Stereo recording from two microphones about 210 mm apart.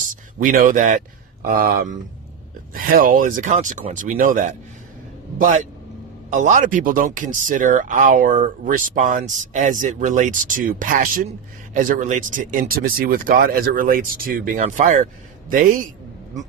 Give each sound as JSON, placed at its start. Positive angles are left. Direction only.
{"t": 0.1, "sound": "speech", "side_deg": -40}